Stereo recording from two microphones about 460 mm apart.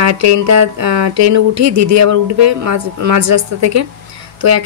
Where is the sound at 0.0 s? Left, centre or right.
Right.